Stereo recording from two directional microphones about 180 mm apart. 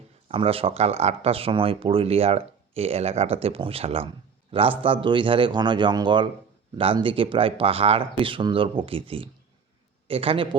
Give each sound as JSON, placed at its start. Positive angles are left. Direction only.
{"t": 0.3, "sound": "speech", "side_deg": -30}